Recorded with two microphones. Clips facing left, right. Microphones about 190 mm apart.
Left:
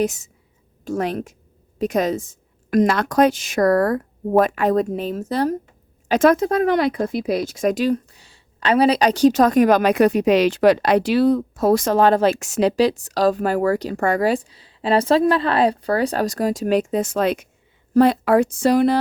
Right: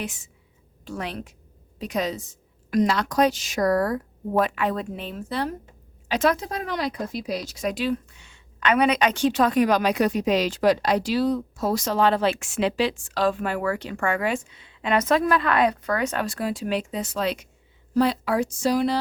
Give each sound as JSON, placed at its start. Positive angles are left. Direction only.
{"t": 0.0, "sound": "a woman's voice", "side_deg": 40}